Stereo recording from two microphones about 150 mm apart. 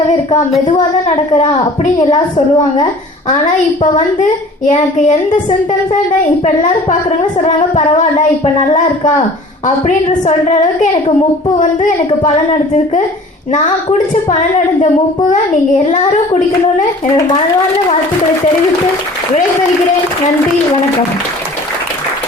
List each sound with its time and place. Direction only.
0.8 s speech: 50° left (ahead or behind)
3.8 s a woman's voice: 55° left (ahead or behind)
11.6 s a woman's voice: 55° left (ahead or behind)
15.3 s a woman's voice: 55° left (ahead or behind)